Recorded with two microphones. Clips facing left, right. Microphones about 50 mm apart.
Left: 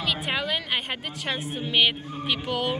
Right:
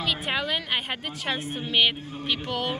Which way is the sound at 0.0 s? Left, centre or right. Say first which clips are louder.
Even; centre.